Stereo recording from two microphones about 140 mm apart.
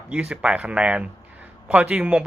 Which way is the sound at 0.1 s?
10° right (ahead or behind).